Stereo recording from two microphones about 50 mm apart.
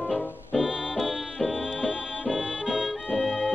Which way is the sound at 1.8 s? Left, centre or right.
Centre.